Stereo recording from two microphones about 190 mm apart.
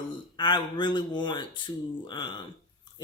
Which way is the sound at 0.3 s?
25° left (ahead or behind).